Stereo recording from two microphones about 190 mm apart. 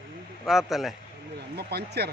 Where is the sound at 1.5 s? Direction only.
60° right (ahead or behind).